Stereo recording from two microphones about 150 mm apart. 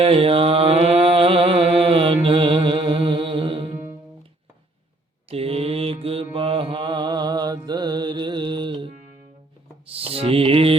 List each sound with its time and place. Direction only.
0.0 s mantra: 40° right (ahead or behind)
5.3 s mantra: 40° right (ahead or behind)
9.8 s music: 40° right (ahead or behind)